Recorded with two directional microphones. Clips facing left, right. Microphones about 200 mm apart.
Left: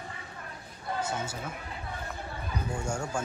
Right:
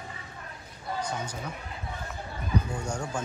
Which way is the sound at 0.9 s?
5° left (ahead or behind).